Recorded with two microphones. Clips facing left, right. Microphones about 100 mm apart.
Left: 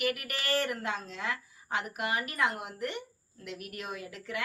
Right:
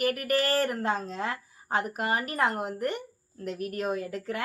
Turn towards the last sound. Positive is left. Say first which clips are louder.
# right 7 dB
turn(degrees=-40)  # may be behind; listen again after turning